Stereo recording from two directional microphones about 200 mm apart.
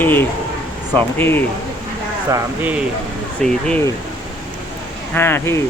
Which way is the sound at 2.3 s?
10° right (ahead or behind).